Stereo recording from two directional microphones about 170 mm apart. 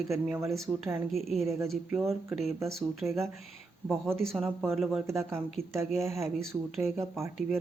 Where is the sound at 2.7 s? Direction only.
Centre (ahead or behind).